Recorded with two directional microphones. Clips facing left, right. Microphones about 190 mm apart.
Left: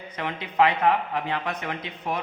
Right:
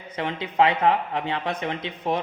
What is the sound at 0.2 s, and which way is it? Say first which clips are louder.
A man's voice: right 1 dB; 30° right (ahead or behind).